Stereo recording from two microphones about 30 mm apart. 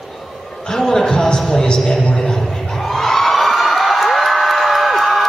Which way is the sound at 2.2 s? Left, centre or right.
Centre.